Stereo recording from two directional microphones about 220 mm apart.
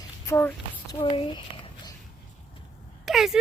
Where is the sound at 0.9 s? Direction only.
25° left (ahead or behind).